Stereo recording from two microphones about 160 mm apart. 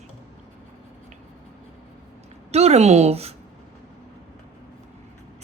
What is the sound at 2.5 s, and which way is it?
Speech, 40° right (ahead or behind).